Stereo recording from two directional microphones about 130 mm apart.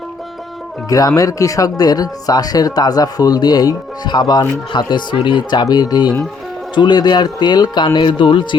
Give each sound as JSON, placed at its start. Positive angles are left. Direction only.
{"t": 0.9, "sound": "speech", "side_deg": 30}